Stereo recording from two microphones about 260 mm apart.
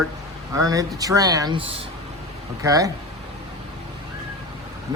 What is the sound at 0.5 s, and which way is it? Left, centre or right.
Speech, centre.